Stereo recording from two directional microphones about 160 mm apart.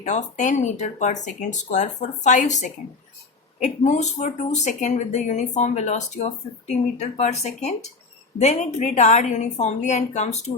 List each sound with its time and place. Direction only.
0.0 s speech: 50° left (ahead or behind)